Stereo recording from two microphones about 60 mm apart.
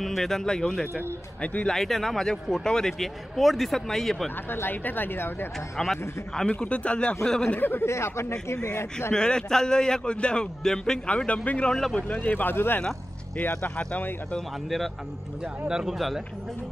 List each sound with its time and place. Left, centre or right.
0.0 s a man's voice: centre
1.4 s speech: left
1.7 s a man's voice: centre
4.5 s speech: left
5.8 s speech: centre
6.4 s speech: centre
7.8 s speech: left
9.1 s a man's voice: centre
12.1 s speech: left
13.7 s speech: left
15.4 s speech: centre